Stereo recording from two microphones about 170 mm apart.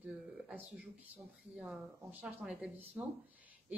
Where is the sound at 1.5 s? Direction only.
5° right (ahead or behind).